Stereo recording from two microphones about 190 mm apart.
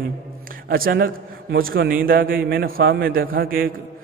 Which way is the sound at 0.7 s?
50° right (ahead or behind).